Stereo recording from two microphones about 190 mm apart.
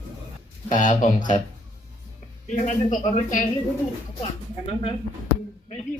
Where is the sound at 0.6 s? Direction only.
40° left (ahead or behind).